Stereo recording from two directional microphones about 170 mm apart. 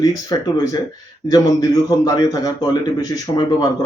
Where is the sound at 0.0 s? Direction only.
20° left (ahead or behind).